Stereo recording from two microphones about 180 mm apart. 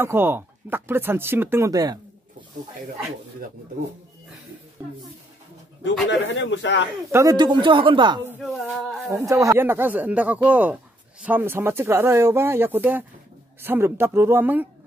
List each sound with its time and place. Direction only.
0.0 s speech: 10° right (ahead or behind)
6.0 s a man's voice: 90° left
7.1 s speech: 15° right (ahead or behind)
8.5 s a sound: centre (ahead or behind)
9.1 s speech: 20° right (ahead or behind)